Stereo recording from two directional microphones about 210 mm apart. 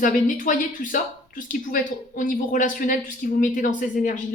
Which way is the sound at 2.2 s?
40° left (ahead or behind).